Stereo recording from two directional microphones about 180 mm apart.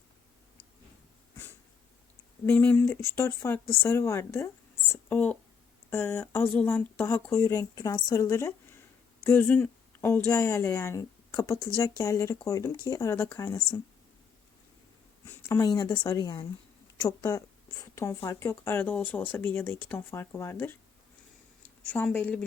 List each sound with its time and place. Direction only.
2.5 s a woman's voice: 10° left (ahead or behind)
15.4 s a woman's voice: 20° left (ahead or behind)